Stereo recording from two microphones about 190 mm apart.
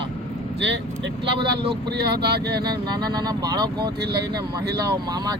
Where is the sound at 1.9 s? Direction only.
60° right (ahead or behind).